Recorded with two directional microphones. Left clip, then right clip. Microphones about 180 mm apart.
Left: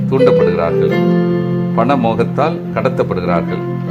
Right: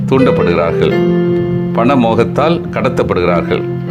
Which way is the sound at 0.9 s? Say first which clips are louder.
Right 2 dB; 10° left (ahead or behind).